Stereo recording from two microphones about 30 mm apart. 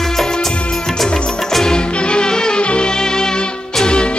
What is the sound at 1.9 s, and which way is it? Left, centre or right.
Music, left.